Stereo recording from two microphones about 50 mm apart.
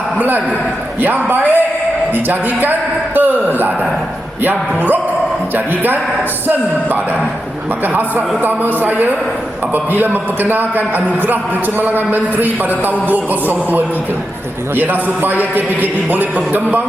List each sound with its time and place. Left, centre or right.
0.2 s a man's voice: right
8.4 s a man's voice: right